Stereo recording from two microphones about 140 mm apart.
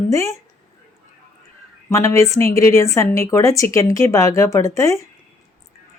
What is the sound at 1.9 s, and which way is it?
Speech, 20° left (ahead or behind).